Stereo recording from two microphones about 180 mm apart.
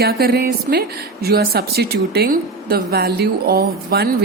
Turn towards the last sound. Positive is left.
turn(degrees=-60)  # may be behind; listen again after turning